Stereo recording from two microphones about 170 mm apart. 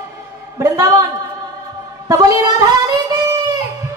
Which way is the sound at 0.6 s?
20° right (ahead or behind).